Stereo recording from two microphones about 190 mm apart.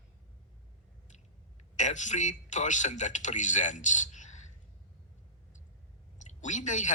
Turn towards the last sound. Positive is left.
turn(degrees=40)  # may be behind; listen again after turning